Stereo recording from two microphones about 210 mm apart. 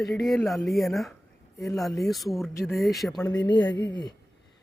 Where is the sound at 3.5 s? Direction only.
20° left (ahead or behind).